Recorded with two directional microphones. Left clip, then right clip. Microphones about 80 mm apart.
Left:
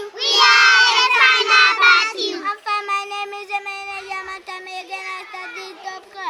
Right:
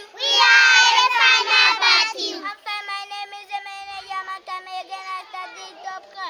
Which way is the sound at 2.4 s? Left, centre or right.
Right.